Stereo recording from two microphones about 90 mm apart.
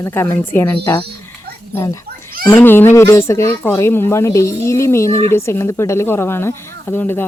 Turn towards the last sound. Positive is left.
turn(degrees=20)  # may be behind; listen again after turning